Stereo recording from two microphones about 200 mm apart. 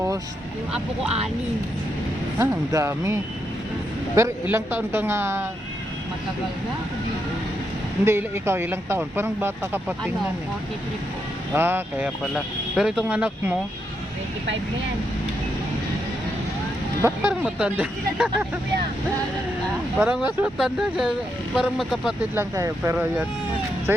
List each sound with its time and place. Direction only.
2.4 s speech: 15° right (ahead or behind)
8.0 s speech: 10° right (ahead or behind)
11.5 s speech: 10° right (ahead or behind)
17.0 s speech: 5° right (ahead or behind)
20.0 s speech: 5° right (ahead or behind)
22.4 s speech: 15° right (ahead or behind)